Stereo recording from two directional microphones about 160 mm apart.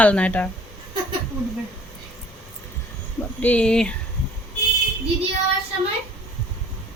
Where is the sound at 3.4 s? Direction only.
10° left (ahead or behind).